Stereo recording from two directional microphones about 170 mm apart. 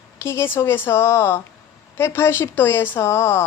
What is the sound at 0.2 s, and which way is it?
A woman's voice, 15° left (ahead or behind).